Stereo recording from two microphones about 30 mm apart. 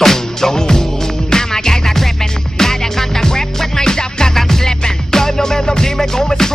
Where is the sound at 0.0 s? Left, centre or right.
Centre.